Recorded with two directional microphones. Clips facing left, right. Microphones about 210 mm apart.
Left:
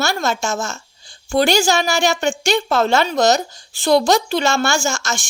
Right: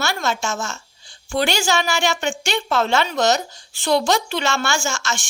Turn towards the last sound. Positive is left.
turn(degrees=40)  # may be behind; listen again after turning